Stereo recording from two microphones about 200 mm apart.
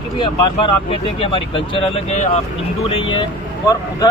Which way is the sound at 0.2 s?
25° left (ahead or behind).